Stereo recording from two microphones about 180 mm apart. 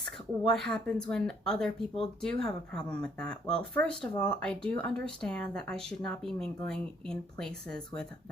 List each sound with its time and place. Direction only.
0.4 s speech: 5° left (ahead or behind)